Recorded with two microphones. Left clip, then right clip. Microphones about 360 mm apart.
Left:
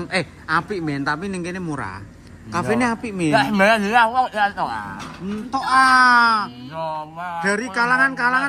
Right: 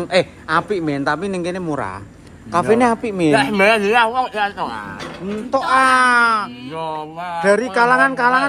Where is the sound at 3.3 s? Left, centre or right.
Left.